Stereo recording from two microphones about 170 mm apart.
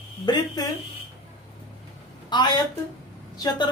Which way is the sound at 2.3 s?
25° left (ahead or behind).